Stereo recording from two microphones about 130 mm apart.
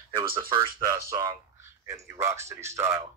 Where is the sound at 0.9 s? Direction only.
25° right (ahead or behind).